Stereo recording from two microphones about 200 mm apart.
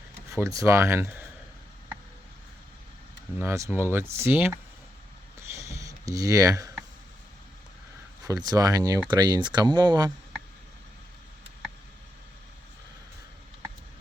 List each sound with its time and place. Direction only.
0.3 s speech: 15° right (ahead or behind)
3.3 s speech: 15° right (ahead or behind)
5.6 s a sound: 15° right (ahead or behind)
8.2 s speech: 20° right (ahead or behind)